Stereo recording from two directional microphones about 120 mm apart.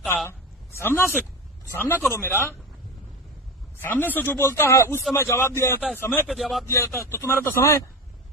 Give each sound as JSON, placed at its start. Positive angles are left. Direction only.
{"t": 0.8, "sound": "speech", "side_deg": 20}
{"t": 3.8, "sound": "speech", "side_deg": 15}
{"t": 6.2, "sound": "speech", "side_deg": 0}
{"t": 6.7, "sound": "speech", "side_deg": 20}